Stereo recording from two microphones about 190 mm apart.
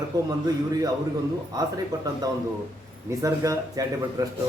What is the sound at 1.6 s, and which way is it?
A man's voice, 20° right (ahead or behind).